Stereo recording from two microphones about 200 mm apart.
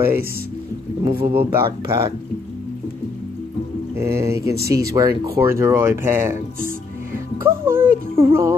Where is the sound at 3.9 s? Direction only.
15° right (ahead or behind).